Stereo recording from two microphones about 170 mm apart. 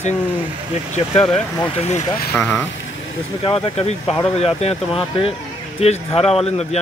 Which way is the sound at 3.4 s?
35° left (ahead or behind).